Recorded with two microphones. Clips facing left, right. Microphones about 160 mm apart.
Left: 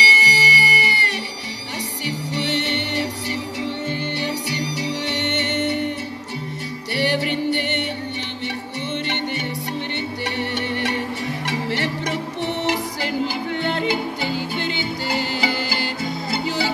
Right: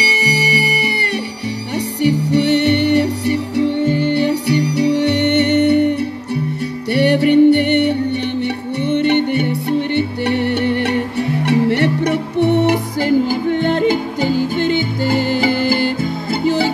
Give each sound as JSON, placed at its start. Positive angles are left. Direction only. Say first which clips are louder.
{"t": 0.1, "sound": "music", "louder": "right 5 dB", "side_deg": -60}